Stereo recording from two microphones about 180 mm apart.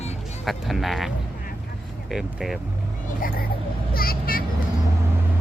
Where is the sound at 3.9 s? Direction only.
55° left (ahead or behind).